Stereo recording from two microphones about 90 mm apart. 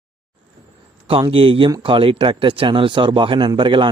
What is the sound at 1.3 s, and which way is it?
Speech, 85° right.